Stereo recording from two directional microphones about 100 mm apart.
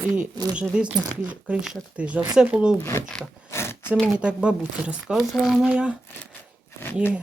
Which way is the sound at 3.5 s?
25° left (ahead or behind).